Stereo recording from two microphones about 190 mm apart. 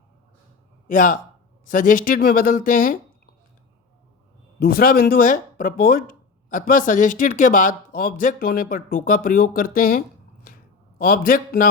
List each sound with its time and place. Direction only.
0.9 s speech: 45° left (ahead or behind)
4.6 s speech: 50° left (ahead or behind)
10.4 s a sound: 50° left (ahead or behind)